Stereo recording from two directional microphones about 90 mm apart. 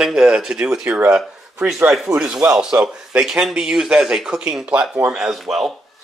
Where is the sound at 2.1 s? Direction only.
5° right (ahead or behind).